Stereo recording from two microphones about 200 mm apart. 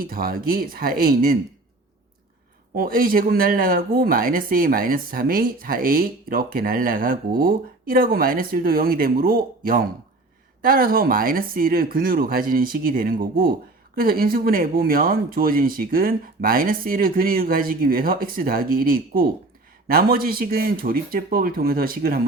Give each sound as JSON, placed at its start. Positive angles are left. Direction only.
{"t": 0.0, "sound": "speech", "side_deg": -45}
{"t": 2.7, "sound": "speech", "side_deg": -45}